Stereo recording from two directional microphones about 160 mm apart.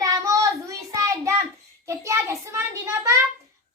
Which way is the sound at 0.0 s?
20° right (ahead or behind).